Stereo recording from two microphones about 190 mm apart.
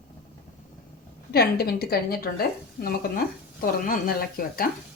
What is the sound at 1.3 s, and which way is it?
A woman's voice, 55° left (ahead or behind).